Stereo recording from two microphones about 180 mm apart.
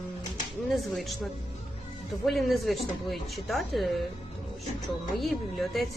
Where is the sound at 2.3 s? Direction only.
Centre (ahead or behind).